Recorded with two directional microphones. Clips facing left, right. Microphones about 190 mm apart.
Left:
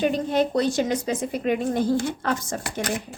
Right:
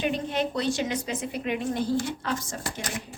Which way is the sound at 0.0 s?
40° left (ahead or behind).